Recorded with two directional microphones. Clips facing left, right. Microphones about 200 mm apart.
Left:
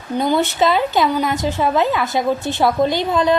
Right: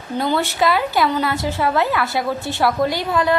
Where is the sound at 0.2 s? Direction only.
20° left (ahead or behind).